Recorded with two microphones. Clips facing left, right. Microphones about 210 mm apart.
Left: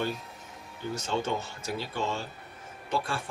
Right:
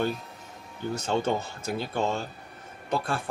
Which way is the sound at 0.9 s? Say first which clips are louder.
Right 4 dB; 60° right (ahead or behind).